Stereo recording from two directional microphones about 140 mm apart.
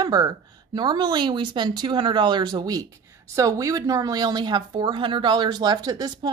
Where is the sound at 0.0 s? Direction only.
30° right (ahead or behind).